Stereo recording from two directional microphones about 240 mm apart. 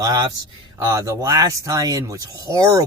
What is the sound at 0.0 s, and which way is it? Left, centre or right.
Speech, centre.